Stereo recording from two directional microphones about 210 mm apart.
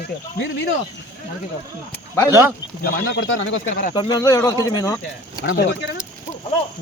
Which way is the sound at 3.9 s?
20° left (ahead or behind).